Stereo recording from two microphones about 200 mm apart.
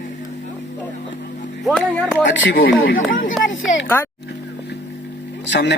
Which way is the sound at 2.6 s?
50° left (ahead or behind).